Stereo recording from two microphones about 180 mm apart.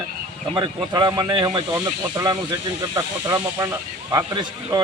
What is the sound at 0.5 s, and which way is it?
Speech, 25° right (ahead or behind).